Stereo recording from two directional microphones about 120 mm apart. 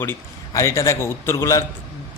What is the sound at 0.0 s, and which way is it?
A man's voice, 20° left (ahead or behind).